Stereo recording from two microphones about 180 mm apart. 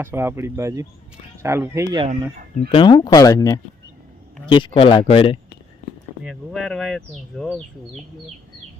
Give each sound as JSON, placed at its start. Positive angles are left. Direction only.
{"t": 0.0, "sound": "speech", "side_deg": -15}
{"t": 2.6, "sound": "speech", "side_deg": 25}
{"t": 6.2, "sound": "speech", "side_deg": 0}